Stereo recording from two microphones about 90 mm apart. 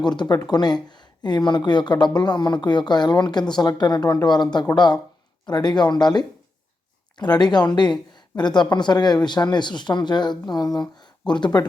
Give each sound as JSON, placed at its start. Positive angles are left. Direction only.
{"t": 0.0, "sound": "speech", "side_deg": 55}